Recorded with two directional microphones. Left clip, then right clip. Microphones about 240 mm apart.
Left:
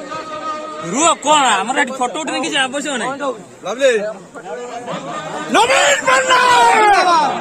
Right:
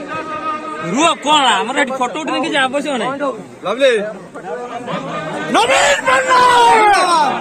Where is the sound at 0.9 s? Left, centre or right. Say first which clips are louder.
Even; left.